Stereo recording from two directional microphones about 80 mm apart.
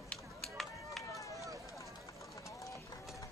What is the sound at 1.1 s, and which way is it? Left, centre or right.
Run, left.